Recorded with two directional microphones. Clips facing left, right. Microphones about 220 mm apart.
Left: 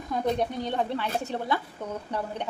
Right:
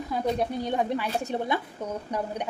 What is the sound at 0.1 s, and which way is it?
A woman's voice, 5° right (ahead or behind).